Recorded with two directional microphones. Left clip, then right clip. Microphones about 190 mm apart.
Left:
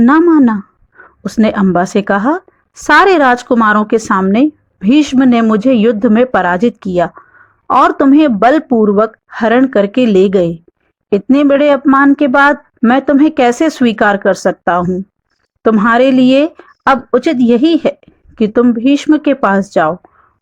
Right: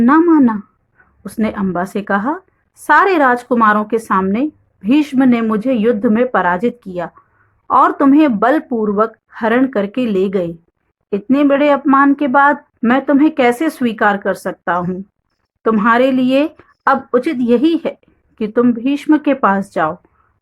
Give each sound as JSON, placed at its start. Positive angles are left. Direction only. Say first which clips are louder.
{"t": 0.0, "sound": "a woman's voice", "louder": "left 3 dB", "side_deg": 30}